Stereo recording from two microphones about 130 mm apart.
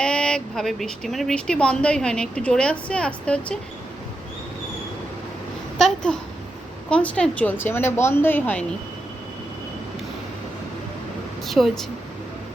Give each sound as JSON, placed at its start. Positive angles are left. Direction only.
{"t": 0.0, "sound": "speech", "side_deg": 5}
{"t": 5.7, "sound": "a child's voice", "side_deg": 5}
{"t": 11.4, "sound": "speech", "side_deg": 0}